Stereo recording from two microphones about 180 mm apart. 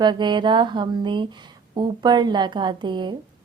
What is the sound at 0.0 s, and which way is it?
Speech, 25° right (ahead or behind).